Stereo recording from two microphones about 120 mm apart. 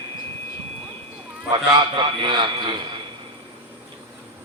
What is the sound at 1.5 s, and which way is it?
A man's voice, 40° right (ahead or behind).